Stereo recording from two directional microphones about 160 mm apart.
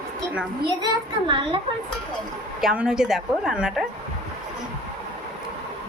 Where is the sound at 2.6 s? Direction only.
5° right (ahead or behind).